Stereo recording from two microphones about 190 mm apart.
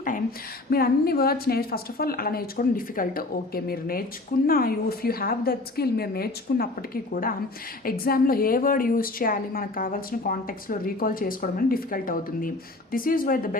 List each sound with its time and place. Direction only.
0.0 s a woman's voice: 50° left (ahead or behind)